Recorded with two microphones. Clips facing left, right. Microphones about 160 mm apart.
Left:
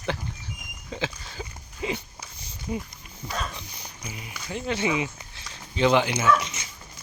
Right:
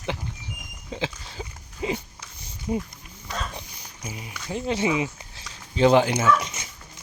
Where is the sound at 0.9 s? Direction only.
30° right (ahead or behind).